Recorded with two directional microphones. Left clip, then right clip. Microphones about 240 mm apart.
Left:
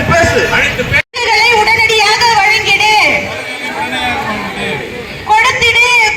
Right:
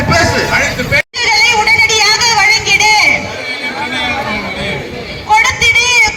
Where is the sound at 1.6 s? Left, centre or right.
Centre.